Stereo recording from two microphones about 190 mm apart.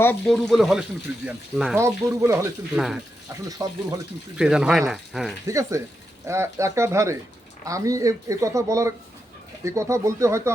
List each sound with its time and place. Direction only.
0.0 s speech: 5° left (ahead or behind)
1.8 s speech: 15° right (ahead or behind)
2.7 s speech: centre (ahead or behind)
3.4 s speech: 20° right (ahead or behind)
4.4 s speech: 5° right (ahead or behind)
5.5 s speech: 15° right (ahead or behind)